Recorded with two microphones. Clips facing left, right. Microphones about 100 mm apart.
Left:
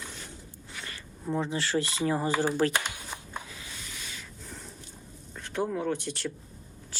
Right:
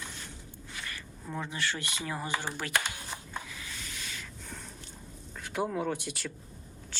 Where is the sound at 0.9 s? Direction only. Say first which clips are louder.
Left 10 dB; 25° left (ahead or behind).